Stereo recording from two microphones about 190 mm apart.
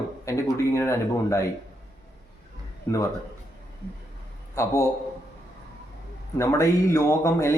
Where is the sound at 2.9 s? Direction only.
15° left (ahead or behind).